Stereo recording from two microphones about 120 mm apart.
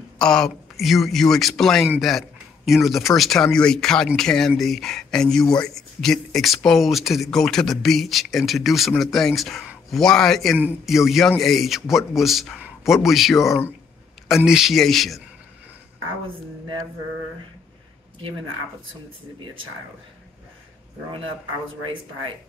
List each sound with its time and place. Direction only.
0.2 s speech: 5° left (ahead or behind)